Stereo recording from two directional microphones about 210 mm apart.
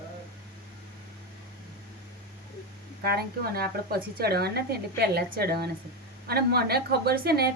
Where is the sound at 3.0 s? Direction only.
45° right (ahead or behind).